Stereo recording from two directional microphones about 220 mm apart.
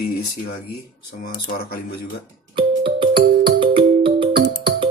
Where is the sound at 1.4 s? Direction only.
45° left (ahead or behind).